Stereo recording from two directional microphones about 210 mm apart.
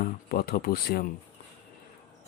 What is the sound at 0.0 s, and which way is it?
Speech, 45° left (ahead or behind).